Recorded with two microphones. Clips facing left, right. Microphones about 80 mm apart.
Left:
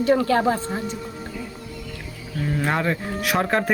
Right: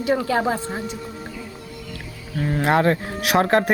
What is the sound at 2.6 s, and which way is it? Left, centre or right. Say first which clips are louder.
Speech: right 6 dB; right.